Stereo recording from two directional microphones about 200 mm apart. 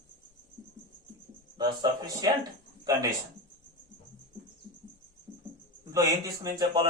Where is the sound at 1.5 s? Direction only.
20° right (ahead or behind).